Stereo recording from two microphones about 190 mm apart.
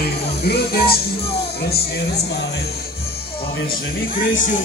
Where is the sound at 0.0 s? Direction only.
55° left (ahead or behind).